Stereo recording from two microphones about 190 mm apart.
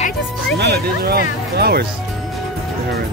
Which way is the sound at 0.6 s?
55° right (ahead or behind).